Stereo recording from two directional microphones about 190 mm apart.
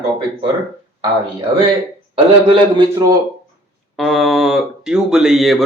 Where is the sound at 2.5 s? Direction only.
20° right (ahead or behind).